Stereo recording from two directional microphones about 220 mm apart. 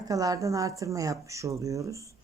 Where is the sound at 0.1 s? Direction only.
15° right (ahead or behind).